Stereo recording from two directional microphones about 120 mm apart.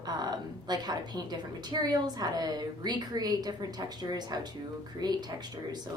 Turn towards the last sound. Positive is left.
turn(degrees=-35)  # may be behind; listen again after turning